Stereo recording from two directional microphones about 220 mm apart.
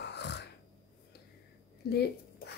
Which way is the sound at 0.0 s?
50° left (ahead or behind).